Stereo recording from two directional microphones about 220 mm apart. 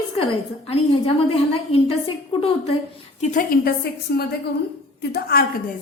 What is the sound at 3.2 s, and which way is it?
A woman's voice, 35° left (ahead or behind).